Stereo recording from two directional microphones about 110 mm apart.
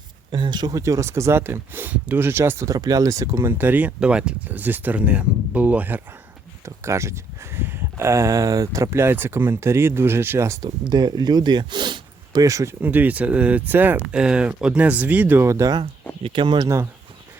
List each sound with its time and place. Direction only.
0.3 s speech: 45° right (ahead or behind); by 6.0 s 15° right (ahead or behind)
6.7 s speech: 25° right (ahead or behind)
10.6 s speech: 40° right (ahead or behind)
12.8 s speech: 15° right (ahead or behind)
15.4 s speech: 25° right (ahead or behind)
16.2 s speech: 45° right (ahead or behind)
16.6 s speech: 25° right (ahead or behind)